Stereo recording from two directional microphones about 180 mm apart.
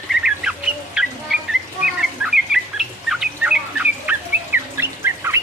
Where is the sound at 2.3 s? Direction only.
Centre (ahead or behind).